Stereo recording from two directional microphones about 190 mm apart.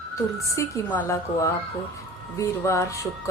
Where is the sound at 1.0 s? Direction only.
15° left (ahead or behind).